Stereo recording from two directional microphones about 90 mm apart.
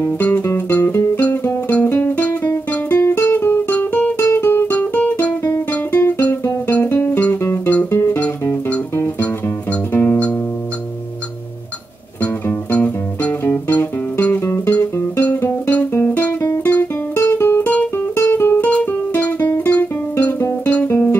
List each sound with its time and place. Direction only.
0.0 s music: 25° left (ahead or behind)
12.2 s music: 20° left (ahead or behind)
14.7 s music: 20° left (ahead or behind)
19.6 s guitar: 20° left (ahead or behind)
20.6 s music: 20° left (ahead or behind)